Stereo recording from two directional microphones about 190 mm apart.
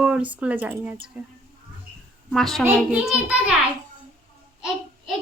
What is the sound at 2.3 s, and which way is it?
A woman's voice, centre (ahead or behind).